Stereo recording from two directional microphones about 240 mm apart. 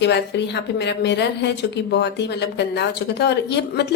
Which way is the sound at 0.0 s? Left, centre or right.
Left.